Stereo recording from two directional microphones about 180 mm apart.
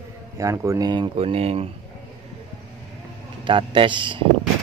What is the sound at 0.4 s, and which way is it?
Speech, 15° right (ahead or behind).